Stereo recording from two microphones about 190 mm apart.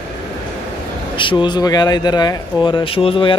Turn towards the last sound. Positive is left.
turn(degrees=30)  # may be behind; listen again after turning